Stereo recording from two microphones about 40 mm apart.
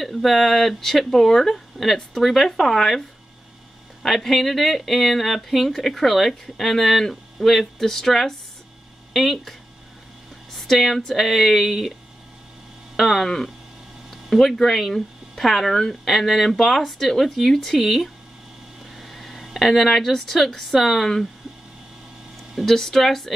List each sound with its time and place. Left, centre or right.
0.0 s speech: centre
12.9 s speech: centre
22.7 s speech: centre